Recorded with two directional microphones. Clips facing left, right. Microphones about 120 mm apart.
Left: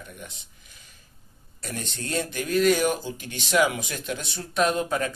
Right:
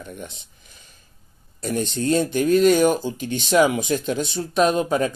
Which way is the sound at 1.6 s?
25° right (ahead or behind).